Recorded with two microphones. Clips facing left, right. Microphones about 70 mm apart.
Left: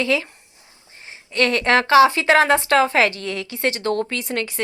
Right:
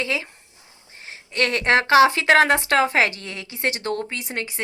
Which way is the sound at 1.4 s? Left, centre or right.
Left.